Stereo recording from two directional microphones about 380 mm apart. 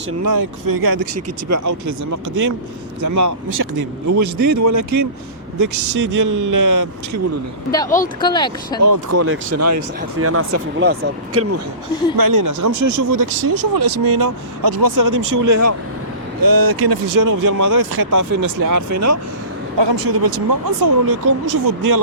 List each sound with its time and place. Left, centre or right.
0.3 s speech: right
7.9 s speech: left
8.8 s speech: right
12.1 s speech: right
16.4 s speech: right
16.9 s speech: right
19.8 s speech: right